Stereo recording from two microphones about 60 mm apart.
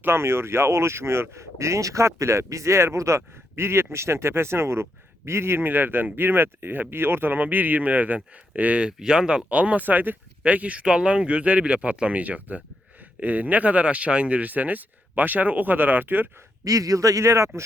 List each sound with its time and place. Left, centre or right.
0.0 s speech: right
8.9 s speech: centre; by 16.3 s right
16.6 s speech: right